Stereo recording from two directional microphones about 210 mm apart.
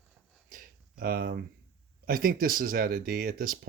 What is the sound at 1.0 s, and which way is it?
Speech, 45° right (ahead or behind).